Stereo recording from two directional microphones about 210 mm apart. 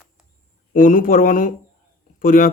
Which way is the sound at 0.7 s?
40° left (ahead or behind).